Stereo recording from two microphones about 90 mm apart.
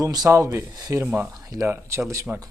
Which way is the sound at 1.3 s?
40° right (ahead or behind).